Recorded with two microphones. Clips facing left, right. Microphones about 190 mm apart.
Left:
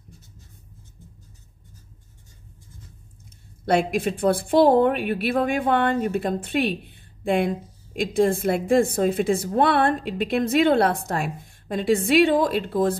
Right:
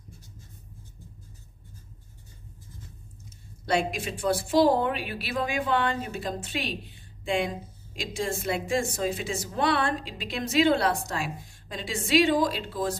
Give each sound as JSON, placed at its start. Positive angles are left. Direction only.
{"t": 3.6, "sound": "a woman's voice", "side_deg": 55}